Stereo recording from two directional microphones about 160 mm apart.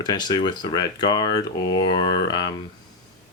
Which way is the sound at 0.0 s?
25° left (ahead or behind).